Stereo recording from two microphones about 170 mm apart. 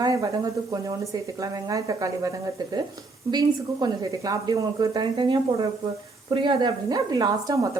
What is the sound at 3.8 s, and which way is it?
A woman's voice, 20° right (ahead or behind).